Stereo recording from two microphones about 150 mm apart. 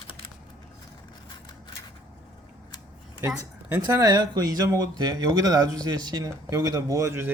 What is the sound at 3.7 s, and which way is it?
Speech, 25° right (ahead or behind).